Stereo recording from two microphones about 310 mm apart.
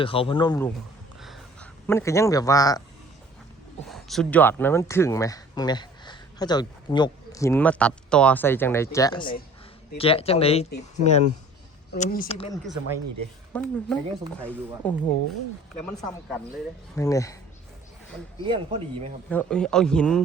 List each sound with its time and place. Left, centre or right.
0.0 s speech: centre
1.2 s a sound: centre
3.8 s speech: centre
13.5 s a man's voice: centre
18.4 s speech: centre
19.3 s a man's voice: centre